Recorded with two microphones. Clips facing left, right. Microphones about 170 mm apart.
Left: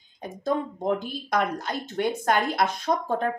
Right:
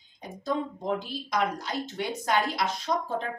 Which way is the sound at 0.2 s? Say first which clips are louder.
Left 3 dB; 55° left (ahead or behind).